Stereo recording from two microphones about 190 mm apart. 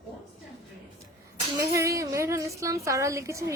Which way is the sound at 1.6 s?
15° right (ahead or behind).